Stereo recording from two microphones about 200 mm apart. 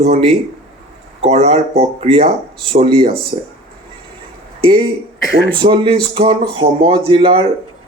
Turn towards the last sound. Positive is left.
turn(degrees=-25)  # may be behind; listen again after turning